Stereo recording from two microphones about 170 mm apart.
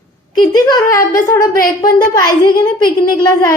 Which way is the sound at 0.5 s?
20° left (ahead or behind).